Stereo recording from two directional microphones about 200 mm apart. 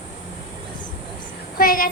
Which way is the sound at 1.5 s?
45° left (ahead or behind).